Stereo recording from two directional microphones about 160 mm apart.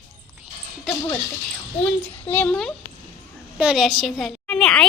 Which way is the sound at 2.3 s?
10° left (ahead or behind).